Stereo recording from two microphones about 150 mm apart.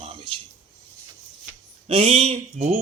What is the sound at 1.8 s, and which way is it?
Speech, 40° right (ahead or behind).